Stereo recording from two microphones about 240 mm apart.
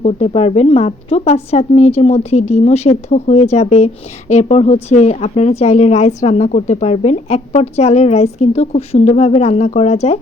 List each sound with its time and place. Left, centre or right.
0.0 s speech: left